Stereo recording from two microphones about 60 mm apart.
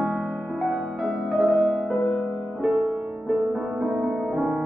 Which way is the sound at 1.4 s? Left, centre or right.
Centre.